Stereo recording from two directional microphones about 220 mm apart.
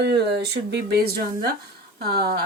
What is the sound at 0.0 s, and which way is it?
Speech, 50° right (ahead or behind).